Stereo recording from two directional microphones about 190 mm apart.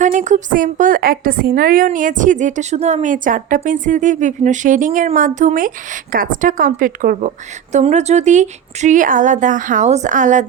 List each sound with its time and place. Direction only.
0.0 s a woman's voice: 40° right (ahead or behind)